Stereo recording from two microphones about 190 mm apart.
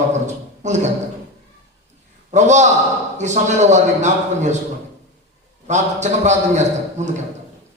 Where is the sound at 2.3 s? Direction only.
40° right (ahead or behind).